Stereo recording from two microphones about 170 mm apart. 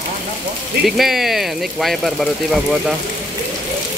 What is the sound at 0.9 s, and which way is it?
Speech, centre (ahead or behind).